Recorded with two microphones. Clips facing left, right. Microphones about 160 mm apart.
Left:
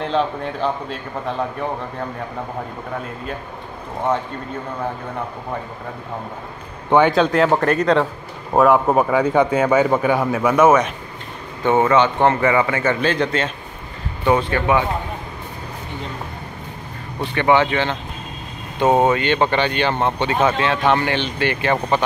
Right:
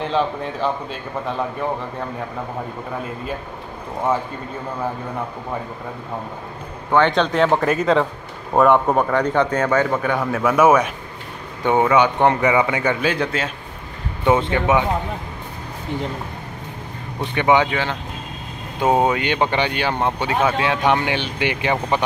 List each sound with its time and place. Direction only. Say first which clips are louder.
0.0 s speech: even; centre (ahead or behind)
7.1 s a man's voice: left 2 dB; 5° left (ahead or behind)
10.5 s speech: even; 10° right (ahead or behind)
14.2 s speech: even; 20° right (ahead or behind)
17.2 s speech: left 1 dB; 15° right (ahead or behind)